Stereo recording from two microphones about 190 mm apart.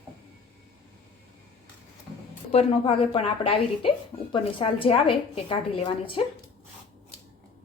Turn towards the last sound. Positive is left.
turn(degrees=25)  # may be behind; listen again after turning